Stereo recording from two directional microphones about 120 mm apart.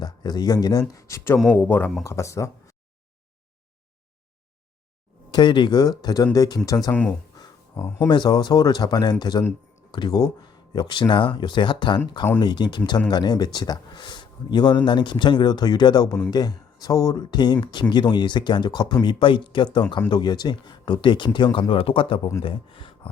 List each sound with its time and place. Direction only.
0.0 s speech: 35° left (ahead or behind)
5.3 s speech: 40° left (ahead or behind)
8.1 s speech: 40° left (ahead or behind)